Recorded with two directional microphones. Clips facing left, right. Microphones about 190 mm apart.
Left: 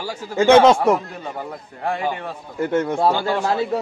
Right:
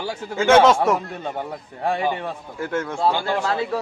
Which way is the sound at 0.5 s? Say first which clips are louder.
Left 2 dB; 15° left (ahead or behind).